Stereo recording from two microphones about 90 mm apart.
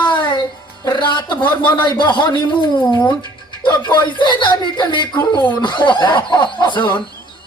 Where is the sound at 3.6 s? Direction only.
55° left (ahead or behind).